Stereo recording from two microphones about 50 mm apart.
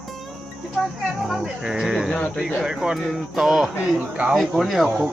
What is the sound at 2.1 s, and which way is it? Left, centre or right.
Speech, centre.